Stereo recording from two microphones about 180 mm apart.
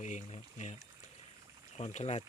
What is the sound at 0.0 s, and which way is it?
Speech, 45° left (ahead or behind).